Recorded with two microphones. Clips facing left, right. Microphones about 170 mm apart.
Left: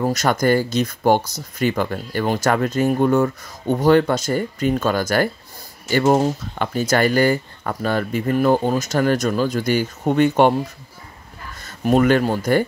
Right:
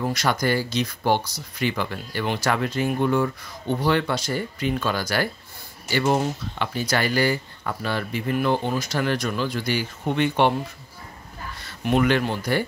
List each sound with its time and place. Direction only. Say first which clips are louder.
0.0 s speech: left 5 dB; 45° left (ahead or behind)
11.6 s speech: left 5 dB; 40° left (ahead or behind)